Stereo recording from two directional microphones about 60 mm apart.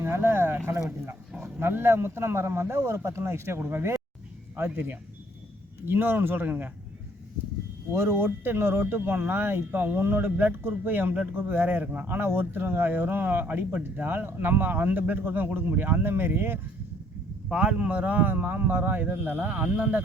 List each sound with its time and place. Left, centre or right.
0.0 s a man's voice: right
5.8 s speech: right
7.9 s speech: right
17.5 s speech: centre